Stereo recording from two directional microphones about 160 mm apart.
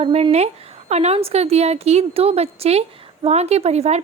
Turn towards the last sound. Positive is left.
turn(degrees=-40)  # may be behind; listen again after turning